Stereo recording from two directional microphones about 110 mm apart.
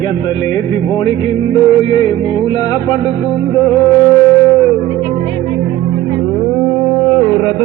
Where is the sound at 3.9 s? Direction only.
45° left (ahead or behind).